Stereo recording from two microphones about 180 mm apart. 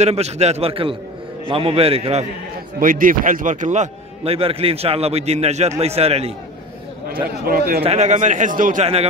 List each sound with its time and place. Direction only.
0.0 s a man's voice: 35° right (ahead or behind)
2.8 s a man's voice: 50° right (ahead or behind); by 6.3 s 35° right (ahead or behind)
7.2 s a man's voice: 55° right (ahead or behind)
7.8 s a man's voice: 40° right (ahead or behind)